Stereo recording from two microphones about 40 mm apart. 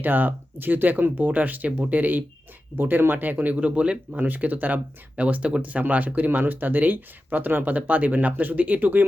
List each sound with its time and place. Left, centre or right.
0.0 s speech: right
4.4 s speech: right
5.1 s speech: right
6.1 s speech: right